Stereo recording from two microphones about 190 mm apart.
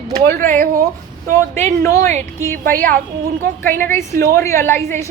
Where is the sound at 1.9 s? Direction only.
45° right (ahead or behind).